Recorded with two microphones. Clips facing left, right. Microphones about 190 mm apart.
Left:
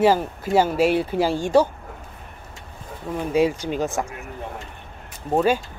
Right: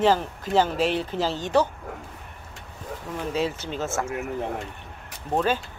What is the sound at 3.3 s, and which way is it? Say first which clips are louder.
Speech: left 8 dB; 10° left (ahead or behind).